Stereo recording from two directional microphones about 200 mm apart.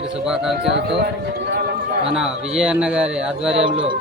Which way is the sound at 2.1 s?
5° right (ahead or behind).